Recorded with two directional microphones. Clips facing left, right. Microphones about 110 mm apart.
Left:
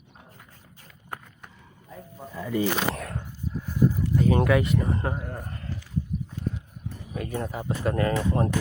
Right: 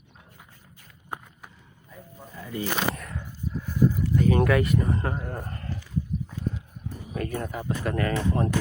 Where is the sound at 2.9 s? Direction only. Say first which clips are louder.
Left 5 dB; 75° left (ahead or behind).